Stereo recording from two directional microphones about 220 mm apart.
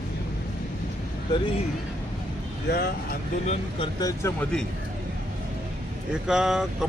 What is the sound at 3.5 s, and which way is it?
Speech, 20° left (ahead or behind).